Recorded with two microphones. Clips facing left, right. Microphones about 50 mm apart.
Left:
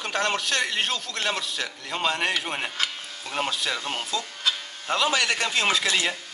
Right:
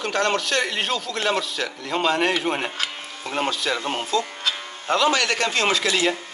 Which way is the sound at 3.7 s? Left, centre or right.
Centre.